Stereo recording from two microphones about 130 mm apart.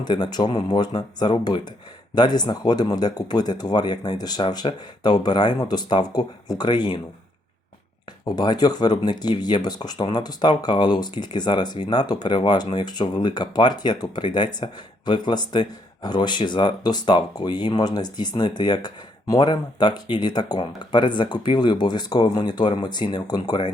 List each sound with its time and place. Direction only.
0.0 s speech: 35° left (ahead or behind)
8.2 s speech: 30° left (ahead or behind)